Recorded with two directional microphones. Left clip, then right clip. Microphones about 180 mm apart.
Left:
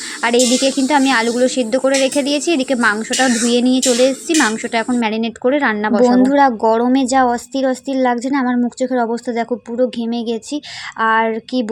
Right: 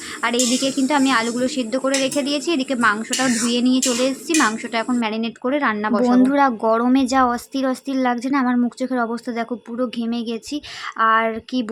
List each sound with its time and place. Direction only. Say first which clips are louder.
0.2 s speech: left 6 dB; 20° left (ahead or behind)